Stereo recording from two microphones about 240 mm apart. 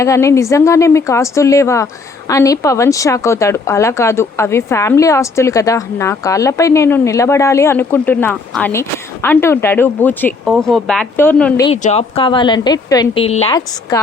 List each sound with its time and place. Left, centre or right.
0.0 s a woman's voice: centre
11.6 s a woman's voice: left